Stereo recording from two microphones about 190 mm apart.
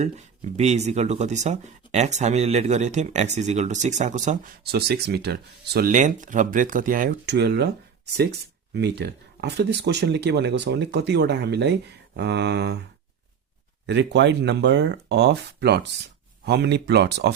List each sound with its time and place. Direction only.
0.0 s speech: 35° right (ahead or behind)
4.7 s speech: 60° right (ahead or behind)
8.7 s speech: 60° right (ahead or behind)
13.8 s speech: 65° right (ahead or behind)